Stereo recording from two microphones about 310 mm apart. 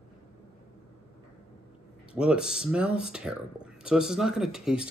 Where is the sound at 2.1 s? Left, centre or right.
Centre.